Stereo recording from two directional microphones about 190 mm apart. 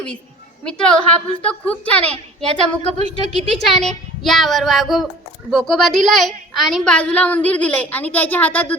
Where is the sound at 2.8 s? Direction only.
35° right (ahead or behind).